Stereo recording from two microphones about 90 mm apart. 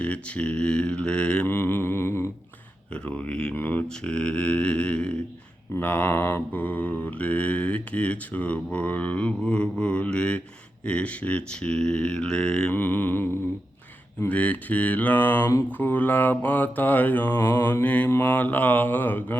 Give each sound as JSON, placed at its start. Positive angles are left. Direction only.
{"t": 0.0, "sound": "mantra", "side_deg": 15}
{"t": 1.5, "sound": "mantra", "side_deg": 25}
{"t": 2.9, "sound": "mantra", "side_deg": 15}
{"t": 12.7, "sound": "mantra", "side_deg": 20}